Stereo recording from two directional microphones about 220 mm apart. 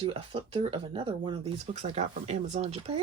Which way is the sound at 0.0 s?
25° right (ahead or behind).